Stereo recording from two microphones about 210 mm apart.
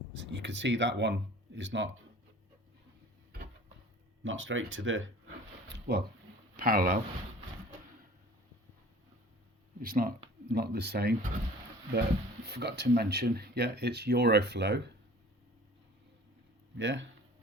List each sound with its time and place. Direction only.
0.1 s speech: 60° right (ahead or behind)
4.2 s speech: 65° right (ahead or behind)
5.6 s a sound: 55° right (ahead or behind)
6.6 s speech: 45° right (ahead or behind)
9.8 s speech: 45° right (ahead or behind)
12.5 s speech: 50° right (ahead or behind)
16.7 s speech: 60° right (ahead or behind)